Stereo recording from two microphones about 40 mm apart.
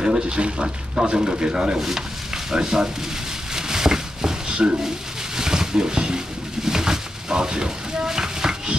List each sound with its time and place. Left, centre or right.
0.0 s a man's voice: right
1.8 s stir: centre
3.5 s a sound: centre